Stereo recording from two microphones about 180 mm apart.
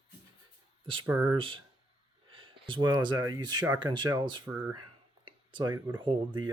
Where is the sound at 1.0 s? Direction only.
15° right (ahead or behind).